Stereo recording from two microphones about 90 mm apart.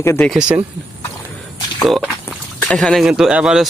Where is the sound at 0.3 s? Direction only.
10° right (ahead or behind).